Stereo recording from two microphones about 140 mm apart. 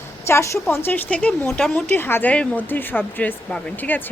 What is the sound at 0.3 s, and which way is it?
A woman's voice, 20° left (ahead or behind).